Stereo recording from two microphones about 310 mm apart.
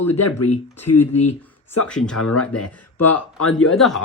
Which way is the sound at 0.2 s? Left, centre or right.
Left.